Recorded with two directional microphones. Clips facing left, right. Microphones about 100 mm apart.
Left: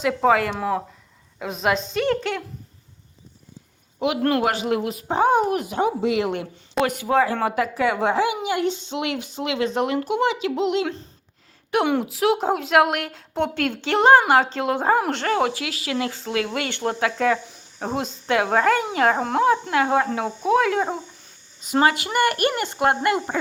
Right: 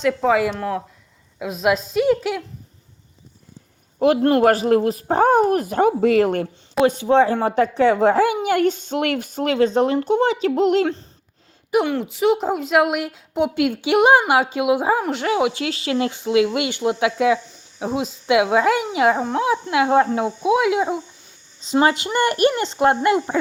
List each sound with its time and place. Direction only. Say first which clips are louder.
0.0 s a woman's voice: right 1 dB; 5° left (ahead or behind)
4.0 s speech: right 6 dB; 35° right (ahead or behind)
6.8 s speech: right 5 dB; 25° right (ahead or behind); by 10.9 s 45° right (ahead or behind)
11.9 s a woman's voice: right 1 dB; 5° left (ahead or behind); by 15.5 s 10° right (ahead or behind)
15.5 s a woman's voice: right 4 dB; 30° right (ahead or behind); by 19.1 s 10° right (ahead or behind)
19.1 s a woman's voice: left 1 dB; centre (ahead or behind)
19.9 s speech: right 4 dB; 25° right (ahead or behind)
20.4 s a woman's voice: right 1 dB; 10° right (ahead or behind)
21.8 s speech: left 1 dB; 25° right (ahead or behind)